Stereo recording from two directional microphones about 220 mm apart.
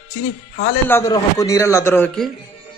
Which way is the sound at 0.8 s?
10° left (ahead or behind).